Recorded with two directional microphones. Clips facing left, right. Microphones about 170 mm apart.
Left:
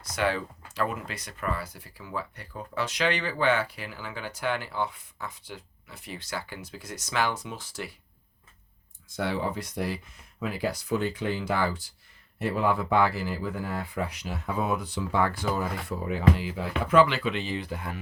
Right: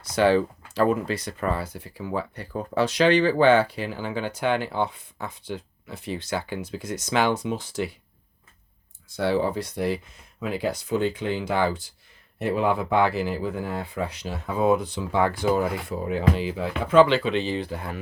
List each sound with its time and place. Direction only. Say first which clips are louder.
0.0 s speech: right 8 dB; 30° right (ahead or behind)
9.0 s speech: right 6 dB; 30° right (ahead or behind)